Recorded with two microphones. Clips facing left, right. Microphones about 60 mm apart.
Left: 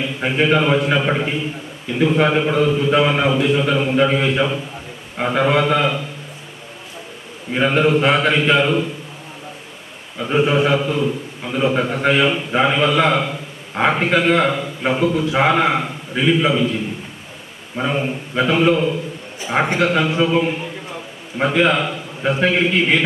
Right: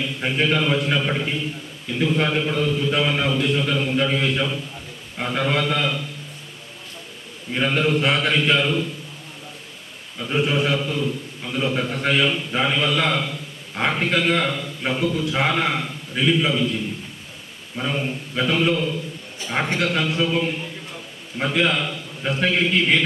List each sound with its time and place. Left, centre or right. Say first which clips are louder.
0.0 s a man's voice: left 4 dB; centre
7.5 s a man's voice: left 5 dB; centre
10.2 s a man's voice: left 5 dB; centre